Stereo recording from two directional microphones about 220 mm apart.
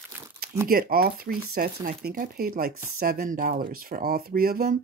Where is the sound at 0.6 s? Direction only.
40° right (ahead or behind).